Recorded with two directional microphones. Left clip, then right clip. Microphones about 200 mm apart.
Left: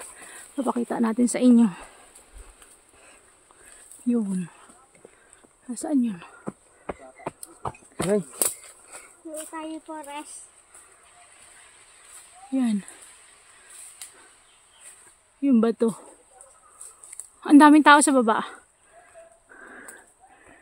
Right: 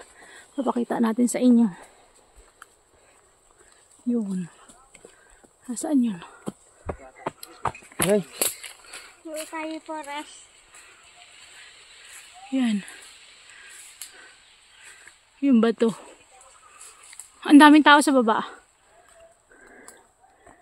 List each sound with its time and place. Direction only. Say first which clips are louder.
0.0 s speech: left 3 dB; 5° left (ahead or behind)
4.1 s speech: left 1 dB; 15° left (ahead or behind)
5.7 s speech: right 1 dB; 10° right (ahead or behind)
7.6 s insect: right 4 dB; 25° right (ahead or behind)
9.5 s speech: right 3 dB; 10° right (ahead or behind)
12.5 s a woman's voice: right 1 dB; 5° left (ahead or behind)
15.4 s a woman's voice: right 1 dB; centre (ahead or behind)
17.4 s a woman's voice: right 1 dB; centre (ahead or behind)